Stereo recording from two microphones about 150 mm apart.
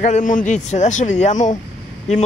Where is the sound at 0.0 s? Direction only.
55° left (ahead or behind).